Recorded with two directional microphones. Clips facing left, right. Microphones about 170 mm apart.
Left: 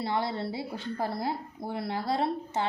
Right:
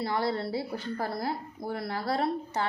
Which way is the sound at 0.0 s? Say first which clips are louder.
Right 1 dB; 25° left (ahead or behind).